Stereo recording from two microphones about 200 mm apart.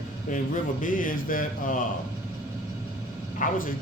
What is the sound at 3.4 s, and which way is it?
Speech, 45° left (ahead or behind).